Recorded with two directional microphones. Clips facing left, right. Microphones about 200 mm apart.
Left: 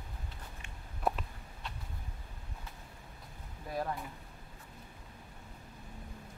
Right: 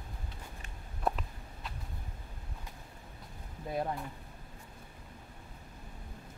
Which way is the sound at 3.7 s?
20° right (ahead or behind).